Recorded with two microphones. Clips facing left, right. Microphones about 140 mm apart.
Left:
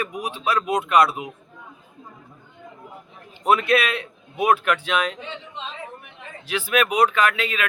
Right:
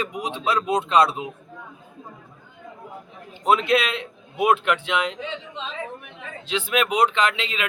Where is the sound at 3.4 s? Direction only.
20° right (ahead or behind).